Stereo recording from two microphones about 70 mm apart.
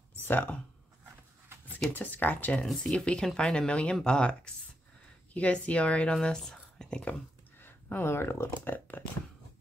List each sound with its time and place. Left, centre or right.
0.2 s speech: left
2.0 s speech: left
2.6 s speech: centre
7.5 s speech: left